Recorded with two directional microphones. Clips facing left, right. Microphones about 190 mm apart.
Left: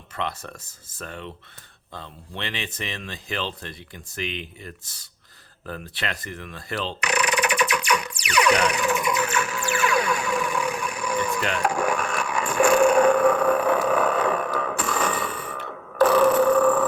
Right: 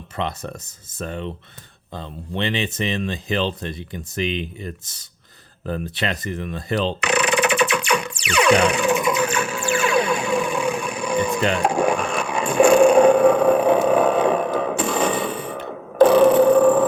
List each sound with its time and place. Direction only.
0.2 s speech: 20° right (ahead or behind)
5.6 s rub: 20° right (ahead or behind)